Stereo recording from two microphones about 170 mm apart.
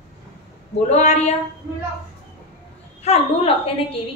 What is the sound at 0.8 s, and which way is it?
Speech, 40° left (ahead or behind).